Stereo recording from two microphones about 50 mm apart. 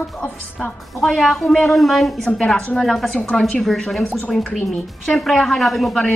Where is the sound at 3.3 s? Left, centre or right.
Centre.